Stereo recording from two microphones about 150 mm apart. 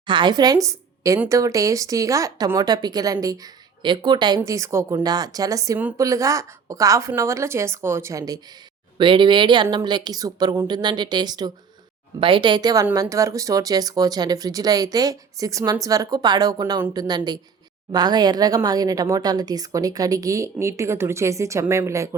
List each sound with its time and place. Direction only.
0.0 s a woman's voice: 30° right (ahead or behind)